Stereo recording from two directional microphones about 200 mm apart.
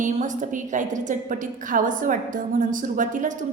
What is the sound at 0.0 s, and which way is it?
A woman's voice, 40° right (ahead or behind).